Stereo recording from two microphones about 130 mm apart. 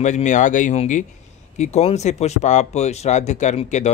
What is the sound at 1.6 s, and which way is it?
Speech, 55° left (ahead or behind).